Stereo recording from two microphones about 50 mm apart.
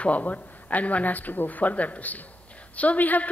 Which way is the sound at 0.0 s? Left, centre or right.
Left.